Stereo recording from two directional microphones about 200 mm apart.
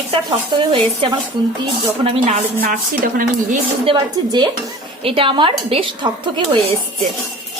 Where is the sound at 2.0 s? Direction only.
35° right (ahead or behind).